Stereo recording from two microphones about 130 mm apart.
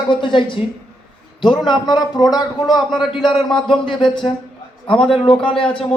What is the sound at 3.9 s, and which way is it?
A man's voice, 35° left (ahead or behind).